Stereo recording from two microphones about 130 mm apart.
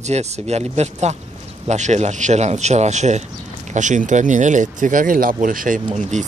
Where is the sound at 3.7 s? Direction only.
70° right (ahead or behind).